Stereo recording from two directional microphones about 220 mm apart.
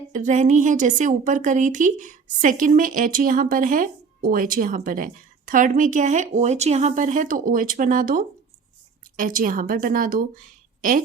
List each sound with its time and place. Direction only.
0.1 s a woman's voice: 35° right (ahead or behind)